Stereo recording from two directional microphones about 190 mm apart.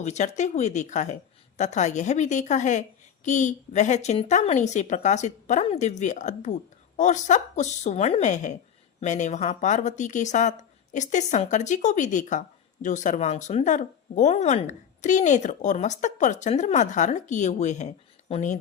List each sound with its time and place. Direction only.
0.0 s speech: 40° left (ahead or behind)